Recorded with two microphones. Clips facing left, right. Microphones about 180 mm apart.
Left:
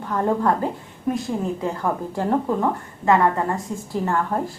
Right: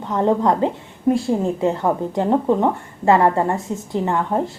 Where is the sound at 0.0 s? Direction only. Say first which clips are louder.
Right 3 dB; 20° right (ahead or behind).